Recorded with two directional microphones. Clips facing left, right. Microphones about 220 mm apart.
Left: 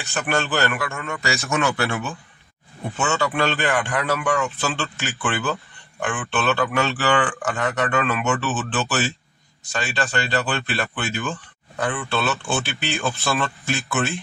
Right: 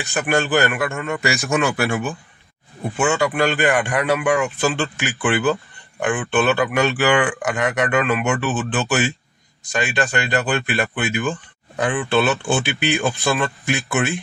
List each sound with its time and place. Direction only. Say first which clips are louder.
0.0 s speech: right 4 dB; 15° right (ahead or behind)
0.9 s a man's voice: right 5 dB; 30° right (ahead or behind)
1.2 s speech: right 2 dB; 15° right (ahead or behind)